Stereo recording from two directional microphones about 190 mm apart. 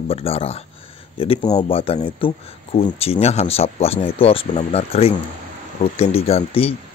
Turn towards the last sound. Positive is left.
turn(degrees=30)  # may be behind; listen again after turning